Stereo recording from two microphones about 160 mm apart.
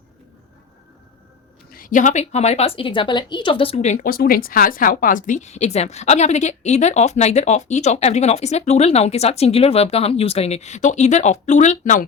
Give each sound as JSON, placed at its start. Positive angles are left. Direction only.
{"t": 1.7, "sound": "speech", "side_deg": 60}